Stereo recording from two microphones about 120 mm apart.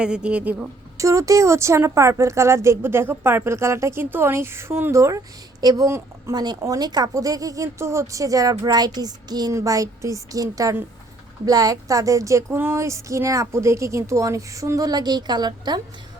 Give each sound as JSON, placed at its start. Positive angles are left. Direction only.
{"t": 0.0, "sound": "speech", "side_deg": -10}
{"t": 0.9, "sound": "speech", "side_deg": -25}